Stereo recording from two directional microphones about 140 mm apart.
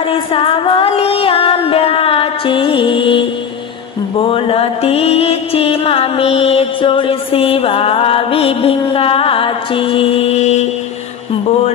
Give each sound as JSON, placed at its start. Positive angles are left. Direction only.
{"t": 0.1, "sound": "female singing", "side_deg": 40}
{"t": 4.2, "sound": "mantra", "side_deg": 40}